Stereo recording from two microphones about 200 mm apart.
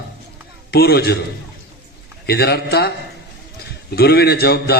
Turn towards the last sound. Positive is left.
turn(degrees=50)  # may be behind; listen again after turning